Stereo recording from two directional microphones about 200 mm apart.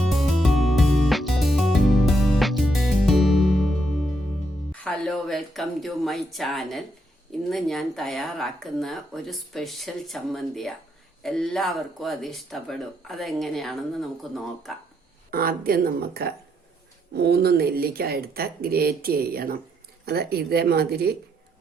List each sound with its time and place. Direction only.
0.1 s music: centre (ahead or behind)
4.7 s speech: 5° left (ahead or behind)
15.3 s speech: 45° right (ahead or behind)